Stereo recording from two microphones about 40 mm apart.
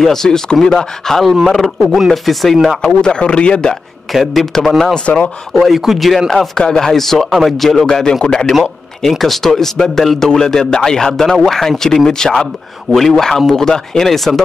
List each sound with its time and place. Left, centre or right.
0.0 s a man's voice: centre
2.0 s chopping: centre
2.9 s speech: left
4.1 s chopping: centre
4.9 s speech: left
5.5 s chopping: centre
6.3 s a man's voice: centre
7.4 s chopping: centre
7.8 s a man's voice: centre
9.2 s a man's voice: centre